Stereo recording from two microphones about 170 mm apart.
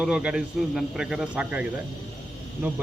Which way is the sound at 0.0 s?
5° right (ahead or behind).